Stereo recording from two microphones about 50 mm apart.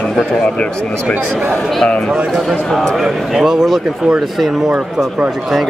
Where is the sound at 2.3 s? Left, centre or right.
Centre.